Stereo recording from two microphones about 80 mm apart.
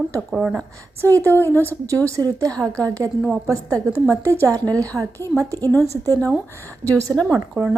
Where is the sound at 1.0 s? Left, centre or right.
Right.